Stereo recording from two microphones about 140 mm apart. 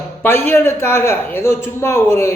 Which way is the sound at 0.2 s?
15° left (ahead or behind).